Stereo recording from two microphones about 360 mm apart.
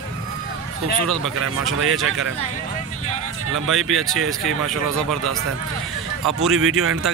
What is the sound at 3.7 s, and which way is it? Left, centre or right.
Speech, centre.